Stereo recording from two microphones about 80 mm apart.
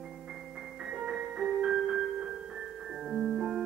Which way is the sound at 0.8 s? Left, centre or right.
Centre.